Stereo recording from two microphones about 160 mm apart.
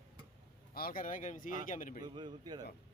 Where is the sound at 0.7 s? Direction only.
65° left (ahead or behind).